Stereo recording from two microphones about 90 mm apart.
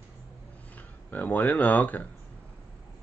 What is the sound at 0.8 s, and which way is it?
Speech, 20° left (ahead or behind).